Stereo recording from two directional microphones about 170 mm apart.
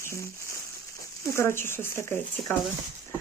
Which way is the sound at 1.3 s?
15° left (ahead or behind).